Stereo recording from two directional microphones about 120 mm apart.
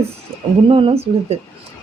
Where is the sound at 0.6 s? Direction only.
50° right (ahead or behind).